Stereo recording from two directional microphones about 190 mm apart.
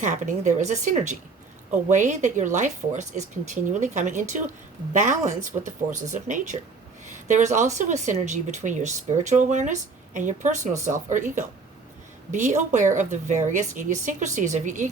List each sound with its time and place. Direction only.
0.0 s speech: 40° right (ahead or behind)